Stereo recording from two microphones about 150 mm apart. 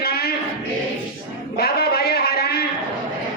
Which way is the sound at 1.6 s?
90° left.